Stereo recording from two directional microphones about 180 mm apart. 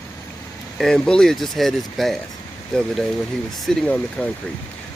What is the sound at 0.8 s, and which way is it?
Speech, 5° left (ahead or behind).